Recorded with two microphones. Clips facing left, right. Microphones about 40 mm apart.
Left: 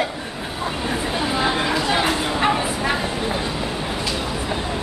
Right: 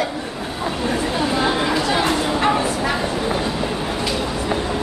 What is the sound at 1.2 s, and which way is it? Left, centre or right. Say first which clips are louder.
Chatter: right 1 dB; centre.